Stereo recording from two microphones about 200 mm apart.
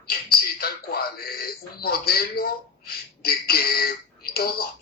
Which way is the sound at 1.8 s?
50° left (ahead or behind).